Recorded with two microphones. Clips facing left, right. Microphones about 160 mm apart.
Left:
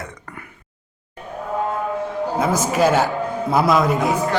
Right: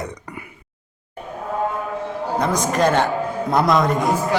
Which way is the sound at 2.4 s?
5° left (ahead or behind).